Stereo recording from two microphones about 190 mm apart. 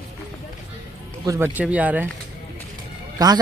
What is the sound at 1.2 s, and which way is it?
Speech, 15° right (ahead or behind).